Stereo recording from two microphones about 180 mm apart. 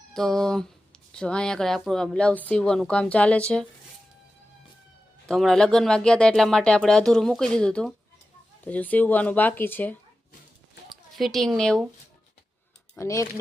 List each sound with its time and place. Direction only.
0.1 s speech: 5° left (ahead or behind)
5.3 s a woman's voice: 5° left (ahead or behind)
13.0 s speech: 15° left (ahead or behind)